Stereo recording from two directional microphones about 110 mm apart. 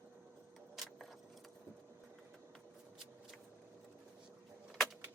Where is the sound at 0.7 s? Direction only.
Centre (ahead or behind).